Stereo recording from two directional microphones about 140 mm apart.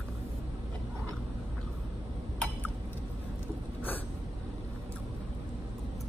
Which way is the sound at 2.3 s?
5° left (ahead or behind).